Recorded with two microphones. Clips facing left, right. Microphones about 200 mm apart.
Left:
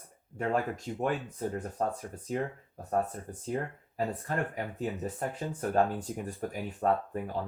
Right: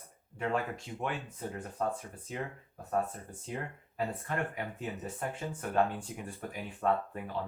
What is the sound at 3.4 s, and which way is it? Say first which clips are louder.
Speech: left 6 dB; 40° left (ahead or behind).